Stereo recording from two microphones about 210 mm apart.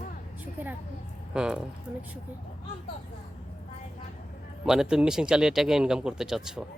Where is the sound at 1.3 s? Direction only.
5° right (ahead or behind).